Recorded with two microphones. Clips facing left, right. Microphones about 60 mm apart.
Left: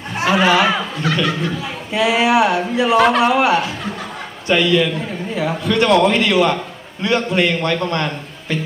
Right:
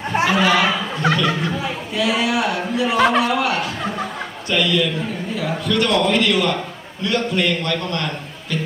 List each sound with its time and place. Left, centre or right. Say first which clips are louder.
0.3 s a man's voice: left 4 dB; left
1.0 s speech: right 1 dB; right
1.9 s a man's voice: left 6 dB; left